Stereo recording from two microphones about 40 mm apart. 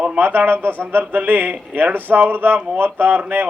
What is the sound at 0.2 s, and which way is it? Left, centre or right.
A man's voice, right.